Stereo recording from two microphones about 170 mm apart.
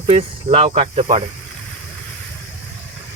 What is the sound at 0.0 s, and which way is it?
Speech, 40° right (ahead or behind).